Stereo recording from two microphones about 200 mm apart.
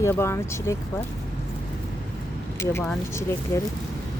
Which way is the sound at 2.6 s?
10° left (ahead or behind).